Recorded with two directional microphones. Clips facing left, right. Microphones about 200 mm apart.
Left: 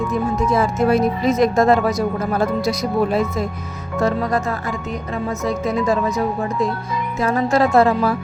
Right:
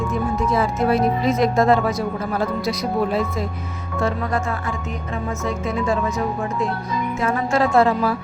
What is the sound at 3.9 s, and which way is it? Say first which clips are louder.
Speech: left 3 dB; 40° left (ahead or behind).